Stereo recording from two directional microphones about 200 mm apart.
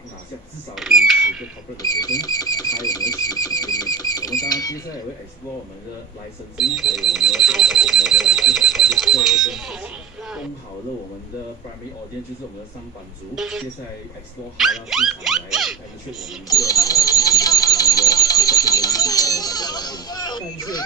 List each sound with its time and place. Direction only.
0.7 s creak: centre (ahead or behind)
1.8 s cash register: 20° left (ahead or behind)
6.6 s speech: centre (ahead or behind)
13.3 s speech: centre (ahead or behind)
16.4 s a sound: 20° left (ahead or behind)